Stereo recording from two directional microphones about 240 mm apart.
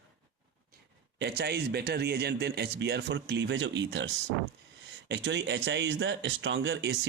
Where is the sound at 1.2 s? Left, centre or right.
Right.